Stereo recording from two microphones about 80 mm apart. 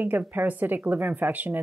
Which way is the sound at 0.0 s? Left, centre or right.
Right.